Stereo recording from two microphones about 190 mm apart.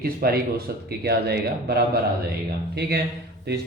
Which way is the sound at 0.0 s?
55° right (ahead or behind).